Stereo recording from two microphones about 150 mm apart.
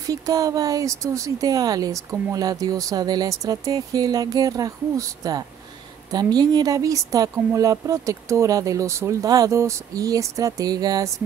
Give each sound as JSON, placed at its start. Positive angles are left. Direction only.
{"t": 0.0, "sound": "speech", "side_deg": -25}